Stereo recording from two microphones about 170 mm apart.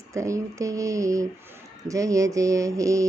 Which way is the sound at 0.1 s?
20° right (ahead or behind).